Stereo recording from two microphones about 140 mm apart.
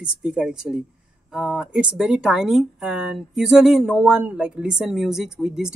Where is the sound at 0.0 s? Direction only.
5° right (ahead or behind).